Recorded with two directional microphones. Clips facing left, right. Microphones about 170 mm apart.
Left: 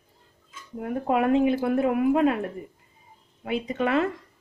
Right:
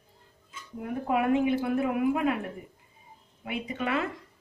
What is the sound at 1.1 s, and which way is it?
Speech, 30° left (ahead or behind).